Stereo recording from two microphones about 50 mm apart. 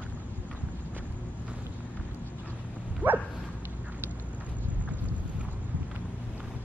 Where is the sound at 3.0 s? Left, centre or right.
Right.